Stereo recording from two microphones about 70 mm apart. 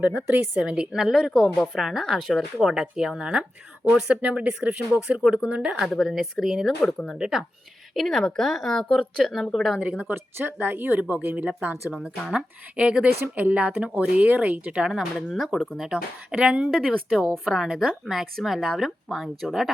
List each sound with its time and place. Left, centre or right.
0.0 s a woman's voice: centre
5.9 s a woman's voice: centre
10.1 s speech: right
13.1 s speech: right
13.3 s speech: right
15.3 s a woman's voice: centre
15.9 s speech: centre
16.7 s a woman's voice: centre
17.4 s speech: centre
18.0 s a woman's voice: centre